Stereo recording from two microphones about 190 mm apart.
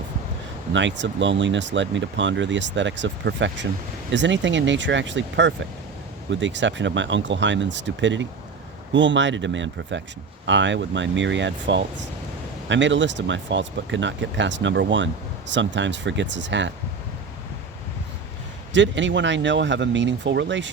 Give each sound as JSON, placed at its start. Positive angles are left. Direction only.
{"t": 0.7, "sound": "speech", "side_deg": -75}
{"t": 18.7, "sound": "speech", "side_deg": -70}